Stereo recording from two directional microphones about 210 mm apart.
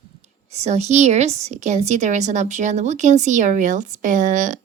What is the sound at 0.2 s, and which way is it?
A woman's voice, 30° right (ahead or behind).